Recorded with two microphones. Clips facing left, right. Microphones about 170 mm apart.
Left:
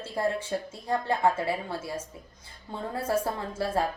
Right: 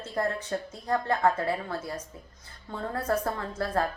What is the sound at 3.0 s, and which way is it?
Speech, 5° left (ahead or behind).